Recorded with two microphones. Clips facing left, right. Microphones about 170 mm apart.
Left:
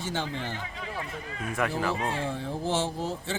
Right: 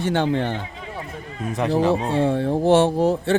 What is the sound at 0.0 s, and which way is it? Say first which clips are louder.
Speech: right 12 dB; 65° right (ahead or behind).